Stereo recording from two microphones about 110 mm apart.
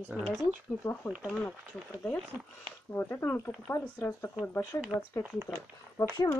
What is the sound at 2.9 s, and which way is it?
Speech, 20° left (ahead or behind).